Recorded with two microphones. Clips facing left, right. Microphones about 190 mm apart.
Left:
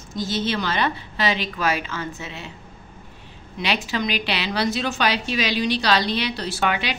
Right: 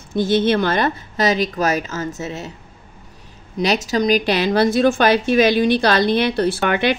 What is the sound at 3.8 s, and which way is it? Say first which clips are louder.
A woman's voice: right 8 dB; 40° right (ahead or behind).